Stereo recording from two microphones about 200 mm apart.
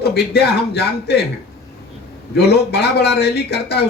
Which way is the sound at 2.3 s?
55° left (ahead or behind).